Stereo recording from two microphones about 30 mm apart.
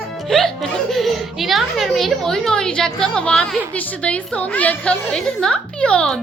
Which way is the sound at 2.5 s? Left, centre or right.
Left.